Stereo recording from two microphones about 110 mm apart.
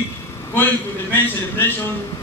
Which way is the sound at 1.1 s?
20° left (ahead or behind).